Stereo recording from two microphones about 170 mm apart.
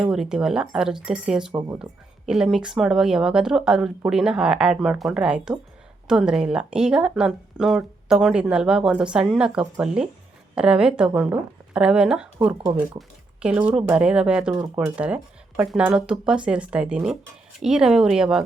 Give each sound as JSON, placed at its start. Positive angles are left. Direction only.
{"t": 0.0, "sound": "speech", "side_deg": -5}
{"t": 1.5, "sound": "speech", "side_deg": -20}
{"t": 1.8, "sound": "speech", "side_deg": -5}